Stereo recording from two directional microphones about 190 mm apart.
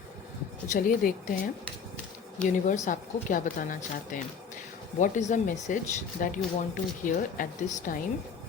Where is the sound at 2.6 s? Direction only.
40° left (ahead or behind).